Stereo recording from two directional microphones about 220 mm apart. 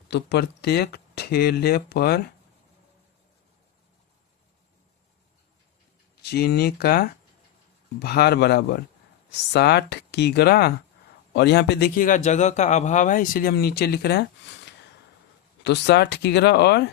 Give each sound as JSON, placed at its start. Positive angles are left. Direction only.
{"t": 0.1, "sound": "a man's voice", "side_deg": 50}
{"t": 6.2, "sound": "a man's voice", "side_deg": 45}